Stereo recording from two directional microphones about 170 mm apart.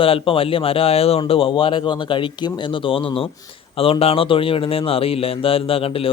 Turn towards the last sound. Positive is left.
turn(degrees=35)  # may be behind; listen again after turning